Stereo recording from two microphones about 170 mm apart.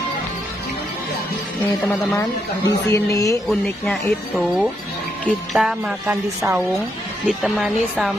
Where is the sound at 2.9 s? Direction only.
20° left (ahead or behind).